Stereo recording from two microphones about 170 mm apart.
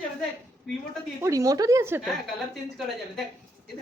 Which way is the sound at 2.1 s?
Centre (ahead or behind).